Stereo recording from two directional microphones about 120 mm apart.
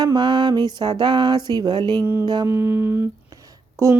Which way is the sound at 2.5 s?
20° right (ahead or behind).